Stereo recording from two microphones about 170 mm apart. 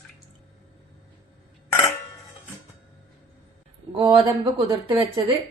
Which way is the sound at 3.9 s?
30° right (ahead or behind).